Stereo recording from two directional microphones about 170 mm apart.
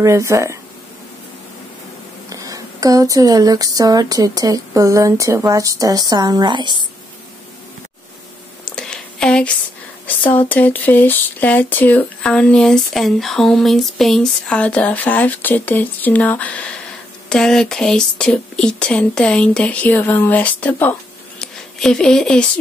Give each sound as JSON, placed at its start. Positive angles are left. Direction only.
{"t": 0.0, "sound": "speech", "side_deg": -20}
{"t": 2.2, "sound": "speech", "side_deg": -20}
{"t": 8.7, "sound": "a sound", "side_deg": 5}
{"t": 10.0, "sound": "speech", "side_deg": 10}